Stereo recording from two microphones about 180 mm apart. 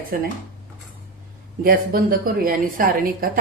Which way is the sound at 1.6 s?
55° right (ahead or behind).